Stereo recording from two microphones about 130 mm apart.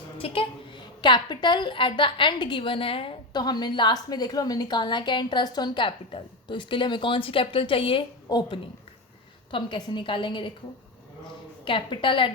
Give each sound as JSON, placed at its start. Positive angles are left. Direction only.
{"t": 0.2, "sound": "a woman's voice", "side_deg": 40}
{"t": 11.6, "sound": "a woman's voice", "side_deg": 40}